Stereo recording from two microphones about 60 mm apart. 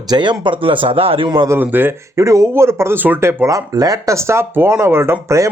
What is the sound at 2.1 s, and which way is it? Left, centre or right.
Speech, right.